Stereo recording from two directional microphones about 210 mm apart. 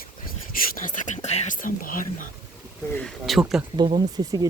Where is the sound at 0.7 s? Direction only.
40° left (ahead or behind).